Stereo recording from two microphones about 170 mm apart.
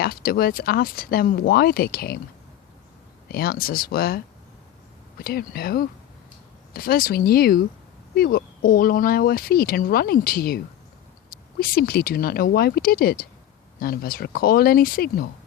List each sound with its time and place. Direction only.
0.0 s speech: 60° left (ahead or behind)
3.2 s speech: 65° left (ahead or behind)
5.2 s speech: 65° left (ahead or behind)